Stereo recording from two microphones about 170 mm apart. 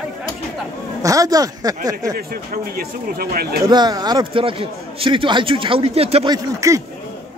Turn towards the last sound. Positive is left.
turn(degrees=-20)  # may be behind; listen again after turning